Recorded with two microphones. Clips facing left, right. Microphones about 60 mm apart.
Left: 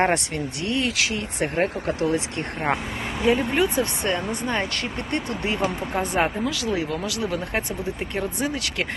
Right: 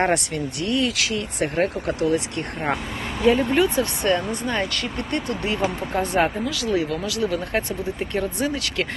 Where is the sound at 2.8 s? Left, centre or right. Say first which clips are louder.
Even; centre.